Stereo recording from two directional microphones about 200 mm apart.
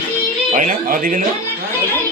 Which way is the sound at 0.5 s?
40° right (ahead or behind).